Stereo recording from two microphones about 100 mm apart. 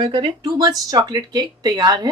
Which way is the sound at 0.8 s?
40° right (ahead or behind).